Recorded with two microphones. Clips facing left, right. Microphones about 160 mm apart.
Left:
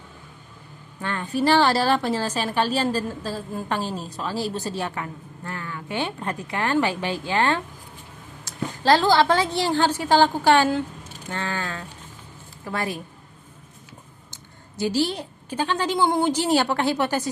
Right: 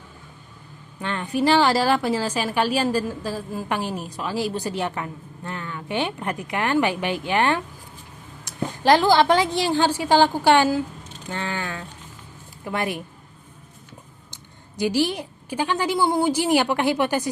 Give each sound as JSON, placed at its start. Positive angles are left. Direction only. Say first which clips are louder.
{"t": 1.0, "sound": "a woman's voice", "louder": "right 1 dB", "side_deg": -15}
{"t": 14.8, "sound": "a woman's voice", "louder": "right 1 dB", "side_deg": -15}